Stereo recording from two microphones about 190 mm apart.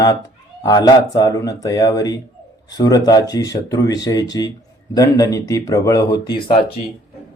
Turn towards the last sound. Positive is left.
turn(degrees=25)  # may be behind; listen again after turning